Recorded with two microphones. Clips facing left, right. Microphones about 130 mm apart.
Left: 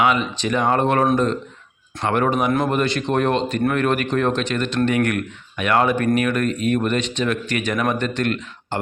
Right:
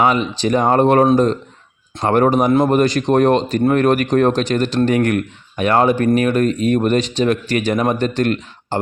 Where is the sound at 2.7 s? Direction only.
40° right (ahead or behind).